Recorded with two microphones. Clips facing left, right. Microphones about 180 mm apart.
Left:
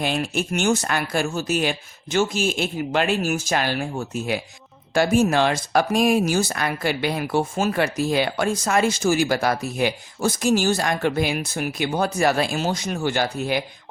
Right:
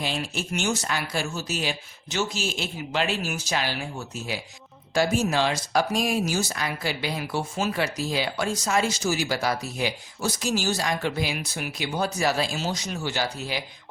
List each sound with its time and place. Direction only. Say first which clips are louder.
0.0 s speech: left 6 dB; 55° left (ahead or behind)